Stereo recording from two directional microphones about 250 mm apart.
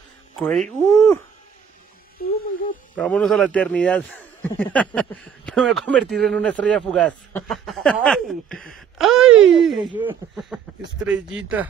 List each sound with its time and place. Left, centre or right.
0.4 s a man's voice: centre
2.2 s speech: left
3.0 s a man's voice: centre